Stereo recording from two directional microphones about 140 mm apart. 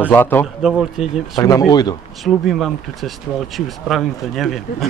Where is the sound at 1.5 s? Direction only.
25° left (ahead or behind).